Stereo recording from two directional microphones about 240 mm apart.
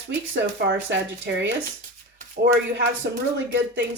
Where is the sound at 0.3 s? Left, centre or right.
Right.